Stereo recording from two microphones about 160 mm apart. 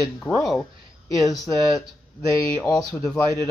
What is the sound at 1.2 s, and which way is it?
Speech, 20° left (ahead or behind).